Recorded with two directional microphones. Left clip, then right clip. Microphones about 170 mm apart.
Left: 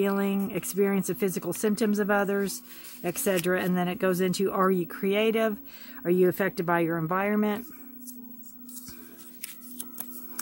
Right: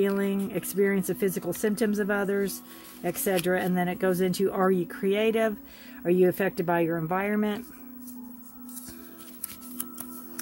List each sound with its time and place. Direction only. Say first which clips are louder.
0.0 s speech: right 1 dB; 25° left (ahead or behind)